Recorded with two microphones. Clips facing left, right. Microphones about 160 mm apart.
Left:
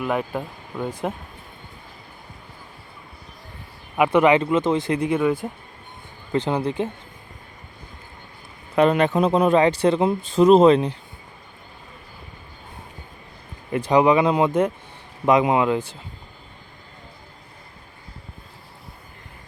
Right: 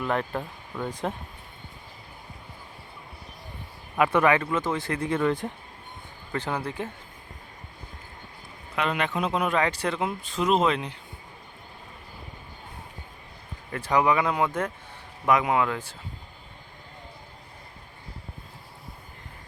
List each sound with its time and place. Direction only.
0.0 s speech: 10° left (ahead or behind)
3.9 s speech: 15° left (ahead or behind)
6.3 s speech: 20° left (ahead or behind)
8.7 s a man's voice: 40° left (ahead or behind)
13.7 s speech: 20° left (ahead or behind)